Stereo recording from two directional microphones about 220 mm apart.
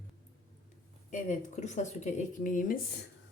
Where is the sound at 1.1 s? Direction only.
35° left (ahead or behind).